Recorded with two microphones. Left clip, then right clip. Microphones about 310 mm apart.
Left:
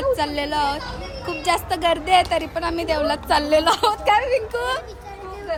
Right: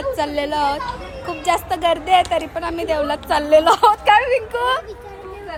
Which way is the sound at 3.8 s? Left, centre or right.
Right.